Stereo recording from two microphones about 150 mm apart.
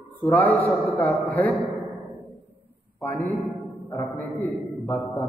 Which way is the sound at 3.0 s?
15° left (ahead or behind).